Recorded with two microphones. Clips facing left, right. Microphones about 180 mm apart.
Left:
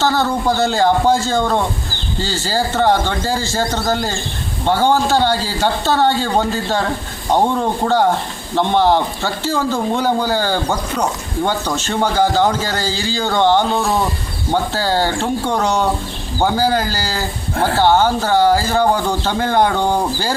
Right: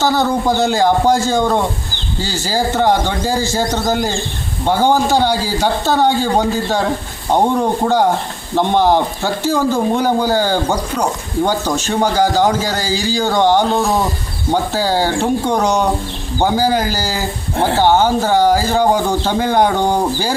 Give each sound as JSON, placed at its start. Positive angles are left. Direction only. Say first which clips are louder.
{"t": 0.0, "sound": "speech", "louder": "right 2 dB", "side_deg": -15}
{"t": 13.7, "sound": "speech", "louder": "right 2 dB", "side_deg": 0}
{"t": 14.5, "sound": "speech", "louder": "right 1 dB", "side_deg": -15}